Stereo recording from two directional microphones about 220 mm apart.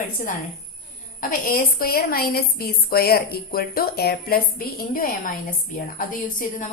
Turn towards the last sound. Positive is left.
turn(degrees=40)  # may be behind; listen again after turning